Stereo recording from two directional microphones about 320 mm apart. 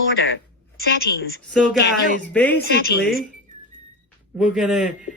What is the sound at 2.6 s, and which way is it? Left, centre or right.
Speech, left.